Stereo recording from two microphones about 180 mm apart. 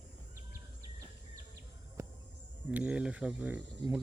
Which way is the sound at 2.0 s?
15° right (ahead or behind).